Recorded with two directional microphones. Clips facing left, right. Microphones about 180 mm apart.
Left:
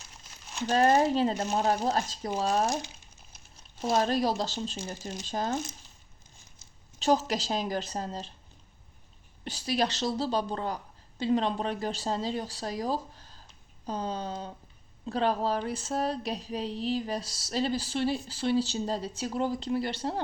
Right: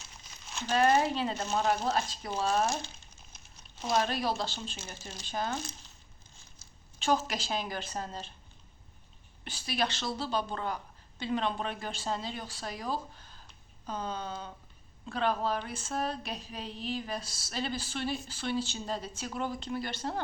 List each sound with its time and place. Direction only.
0.3 s crumpling: 5° left (ahead or behind)
0.7 s speech: 40° left (ahead or behind)
3.8 s speech: 35° left (ahead or behind)
7.0 s speech: 35° left (ahead or behind)
9.4 s speech: 40° left (ahead or behind)